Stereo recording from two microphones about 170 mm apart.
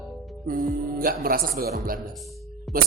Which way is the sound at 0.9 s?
60° right (ahead or behind).